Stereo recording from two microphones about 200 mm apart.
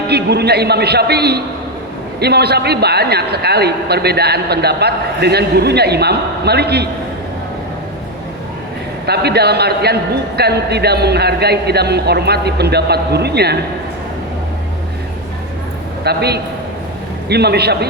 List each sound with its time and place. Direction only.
0.1 s a man's voice: 55° right (ahead or behind)
9.0 s a man's voice: 55° right (ahead or behind)
16.0 s a man's voice: 55° right (ahead or behind)